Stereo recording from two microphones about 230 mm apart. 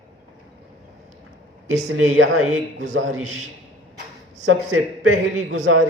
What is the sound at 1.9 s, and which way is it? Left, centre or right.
Speech, right.